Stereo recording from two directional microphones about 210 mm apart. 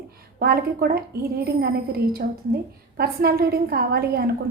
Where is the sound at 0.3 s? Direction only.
45° right (ahead or behind).